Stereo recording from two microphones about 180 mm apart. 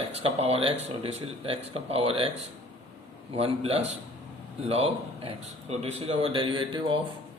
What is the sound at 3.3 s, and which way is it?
A man's voice, 35° right (ahead or behind).